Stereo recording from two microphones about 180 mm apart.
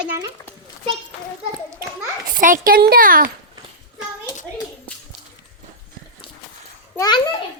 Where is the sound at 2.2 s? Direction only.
50° right (ahead or behind).